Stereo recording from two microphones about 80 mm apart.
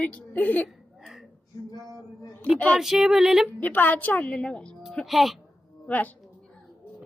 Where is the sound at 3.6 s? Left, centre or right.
Left.